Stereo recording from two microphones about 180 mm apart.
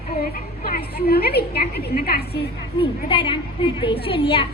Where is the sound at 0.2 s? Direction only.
55° left (ahead or behind).